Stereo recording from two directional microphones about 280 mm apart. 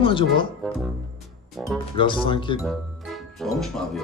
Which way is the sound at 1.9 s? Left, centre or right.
Centre.